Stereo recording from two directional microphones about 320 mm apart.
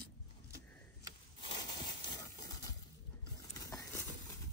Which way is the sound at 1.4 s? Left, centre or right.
Centre.